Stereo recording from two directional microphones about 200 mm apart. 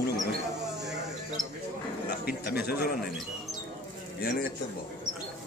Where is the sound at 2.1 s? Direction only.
50° left (ahead or behind).